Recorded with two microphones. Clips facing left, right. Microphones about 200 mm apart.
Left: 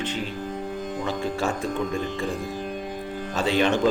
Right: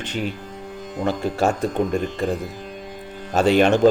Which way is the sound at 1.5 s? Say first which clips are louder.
Right 5 dB; 45° right (ahead or behind).